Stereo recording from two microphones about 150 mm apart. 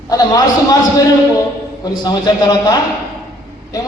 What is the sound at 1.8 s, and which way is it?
Speech, 25° left (ahead or behind).